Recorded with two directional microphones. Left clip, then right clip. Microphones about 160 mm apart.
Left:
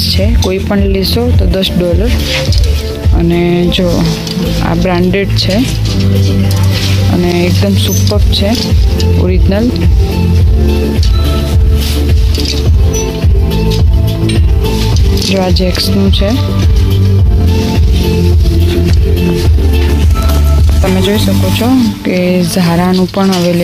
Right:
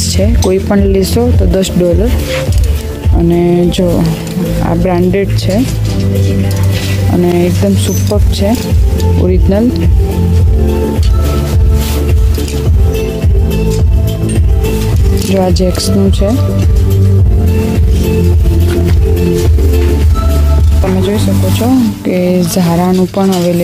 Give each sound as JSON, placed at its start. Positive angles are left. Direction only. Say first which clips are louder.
{"t": 0.5, "sound": "speech", "louder": "right 4 dB", "side_deg": -30}
{"t": 3.2, "sound": "speech", "louder": "right 2 dB", "side_deg": -25}
{"t": 7.2, "sound": "speech", "louder": "right 1 dB", "side_deg": -25}
{"t": 15.3, "sound": "speech", "louder": "right 2 dB", "side_deg": -30}
{"t": 20.9, "sound": "speech", "louder": "left 2 dB", "side_deg": 0}
{"t": 22.0, "sound": "speech", "louder": "even", "side_deg": -15}